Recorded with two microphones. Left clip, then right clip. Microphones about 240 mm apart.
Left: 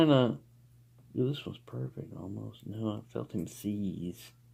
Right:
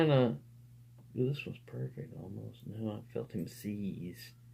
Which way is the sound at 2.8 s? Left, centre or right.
Left.